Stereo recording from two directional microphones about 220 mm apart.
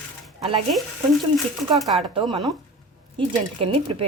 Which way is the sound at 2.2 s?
25° right (ahead or behind).